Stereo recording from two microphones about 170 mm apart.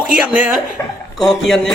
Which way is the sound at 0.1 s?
10° right (ahead or behind).